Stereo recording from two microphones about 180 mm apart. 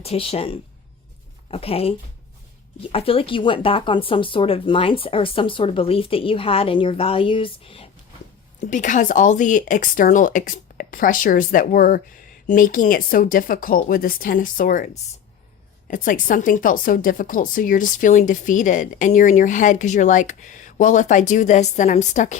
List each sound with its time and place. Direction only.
0.0 s speech: 35° left (ahead or behind)
8.6 s a woman's voice: 45° left (ahead or behind)
15.9 s a woman's voice: 50° left (ahead or behind)